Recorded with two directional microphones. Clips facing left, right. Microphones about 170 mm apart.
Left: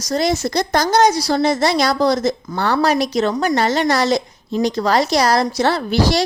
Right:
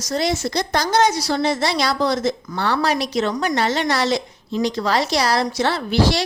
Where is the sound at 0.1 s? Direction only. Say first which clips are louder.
Left 3 dB; 45° left (ahead or behind).